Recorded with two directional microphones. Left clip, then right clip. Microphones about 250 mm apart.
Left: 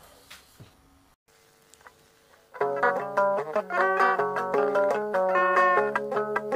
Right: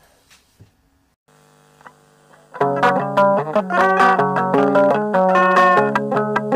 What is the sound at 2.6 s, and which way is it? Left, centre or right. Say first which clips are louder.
Music: right 9 dB; right.